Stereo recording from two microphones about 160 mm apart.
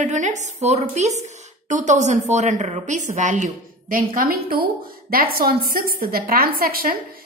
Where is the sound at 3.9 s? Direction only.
65° right (ahead or behind).